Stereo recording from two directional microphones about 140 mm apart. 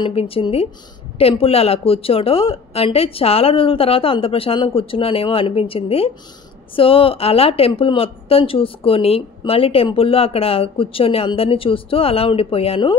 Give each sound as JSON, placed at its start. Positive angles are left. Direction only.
{"t": 0.0, "sound": "speech", "side_deg": 45}